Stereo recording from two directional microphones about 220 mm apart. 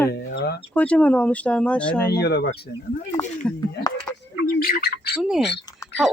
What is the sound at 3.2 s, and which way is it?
Speech, 10° left (ahead or behind).